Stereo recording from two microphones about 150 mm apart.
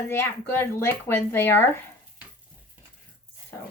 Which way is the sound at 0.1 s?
15° left (ahead or behind).